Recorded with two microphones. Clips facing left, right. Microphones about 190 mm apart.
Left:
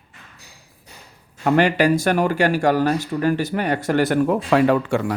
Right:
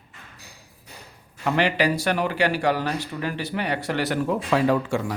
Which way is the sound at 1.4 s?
50° left (ahead or behind).